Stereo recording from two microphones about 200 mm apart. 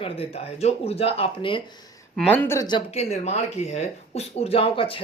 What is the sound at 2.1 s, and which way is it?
Speech, 10° left (ahead or behind).